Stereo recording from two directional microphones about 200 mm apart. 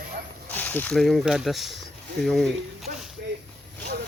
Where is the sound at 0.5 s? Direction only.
10° left (ahead or behind).